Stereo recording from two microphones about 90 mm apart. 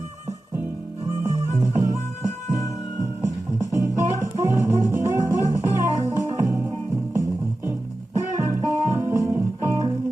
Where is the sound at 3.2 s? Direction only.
40° right (ahead or behind).